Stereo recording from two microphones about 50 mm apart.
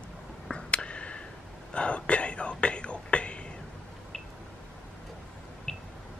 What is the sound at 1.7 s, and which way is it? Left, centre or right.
Whispering, left.